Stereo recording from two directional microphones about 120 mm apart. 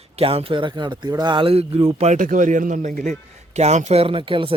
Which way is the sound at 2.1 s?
90° right.